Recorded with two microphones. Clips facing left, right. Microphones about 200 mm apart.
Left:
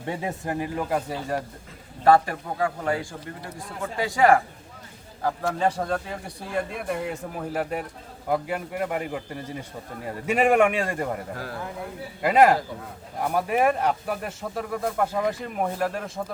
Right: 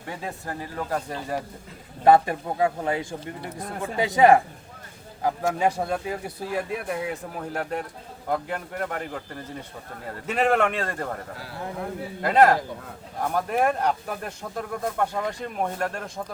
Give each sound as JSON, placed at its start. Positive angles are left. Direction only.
{"t": 0.0, "sound": "a man's voice", "side_deg": 20}
{"t": 2.0, "sound": "a man's voice", "side_deg": -20}